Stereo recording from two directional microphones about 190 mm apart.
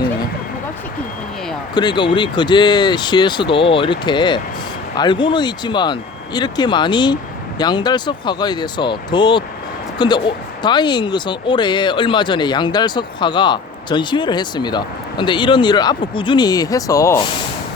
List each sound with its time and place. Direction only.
1.7 s speech: 20° left (ahead or behind)